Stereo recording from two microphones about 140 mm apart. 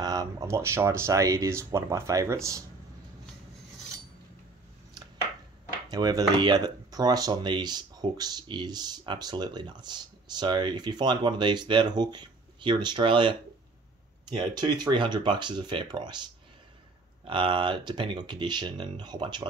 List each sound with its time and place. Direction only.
0.0 s speech: 25° right (ahead or behind)
5.9 s speech: 30° right (ahead or behind)